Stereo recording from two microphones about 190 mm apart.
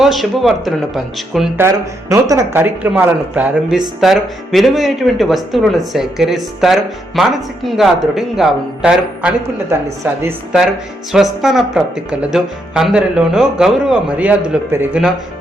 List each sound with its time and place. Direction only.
0.0 s speech: centre (ahead or behind)
1.5 s speech: 15° right (ahead or behind)
11.1 s speech: 5° right (ahead or behind)